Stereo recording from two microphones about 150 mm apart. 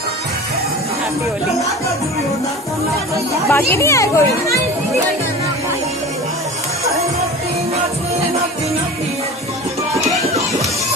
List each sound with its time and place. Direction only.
3.5 s speech: 20° left (ahead or behind)
10.2 s music: 45° right (ahead or behind)